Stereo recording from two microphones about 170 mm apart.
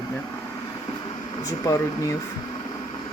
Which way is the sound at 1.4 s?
20° left (ahead or behind).